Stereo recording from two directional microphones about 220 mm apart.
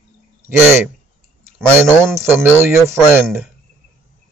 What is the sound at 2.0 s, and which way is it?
Speech, 10° right (ahead or behind).